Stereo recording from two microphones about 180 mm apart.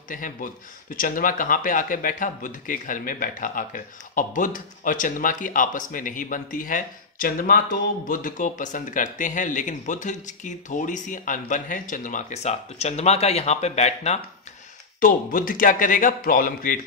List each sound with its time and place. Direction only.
0.1 s speech: 50° left (ahead or behind)
15.0 s speech: 50° left (ahead or behind)